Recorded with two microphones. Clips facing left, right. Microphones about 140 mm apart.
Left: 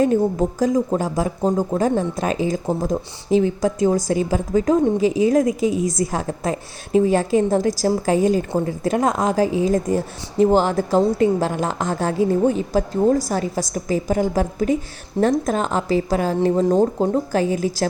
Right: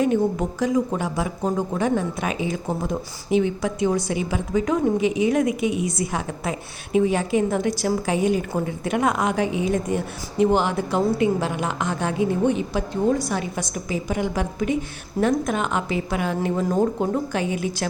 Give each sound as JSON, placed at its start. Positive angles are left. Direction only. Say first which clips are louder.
{"t": 0.0, "sound": "a woman's voice", "louder": "left 3 dB", "side_deg": 40}